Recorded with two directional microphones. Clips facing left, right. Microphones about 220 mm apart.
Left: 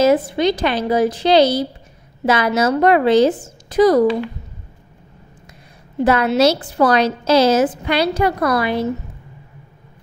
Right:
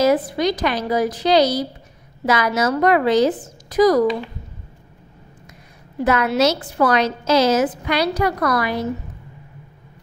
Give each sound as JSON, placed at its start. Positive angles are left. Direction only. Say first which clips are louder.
{"t": 0.0, "sound": "a woman's voice", "louder": "left 3 dB", "side_deg": 25}
{"t": 5.9, "sound": "a woman's voice", "louder": "left 3 dB", "side_deg": 30}